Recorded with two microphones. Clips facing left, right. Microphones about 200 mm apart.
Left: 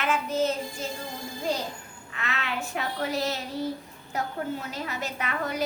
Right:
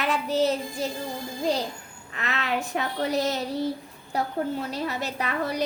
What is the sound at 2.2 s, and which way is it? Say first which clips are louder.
A woman's voice: right 4 dB; 40° right (ahead or behind).